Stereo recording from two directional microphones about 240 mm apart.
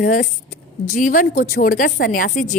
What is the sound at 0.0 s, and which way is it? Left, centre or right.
A woman's voice, left.